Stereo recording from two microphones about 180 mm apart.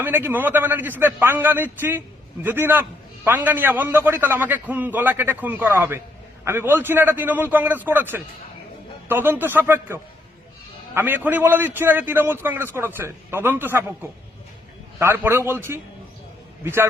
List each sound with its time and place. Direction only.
0.0 s a man's voice: 10° right (ahead or behind)
14.9 s a man's voice: 10° right (ahead or behind)